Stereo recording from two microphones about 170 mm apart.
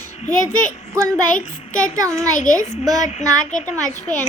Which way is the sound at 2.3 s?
50° left (ahead or behind).